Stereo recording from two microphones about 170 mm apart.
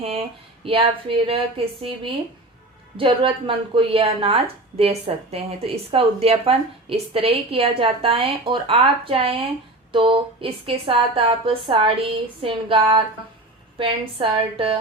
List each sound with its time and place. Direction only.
0.0 s a woman's voice: 35° right (ahead or behind)
3.0 s a woman's voice: 30° right (ahead or behind)